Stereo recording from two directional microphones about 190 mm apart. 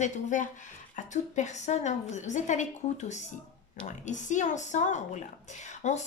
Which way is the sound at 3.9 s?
40° left (ahead or behind).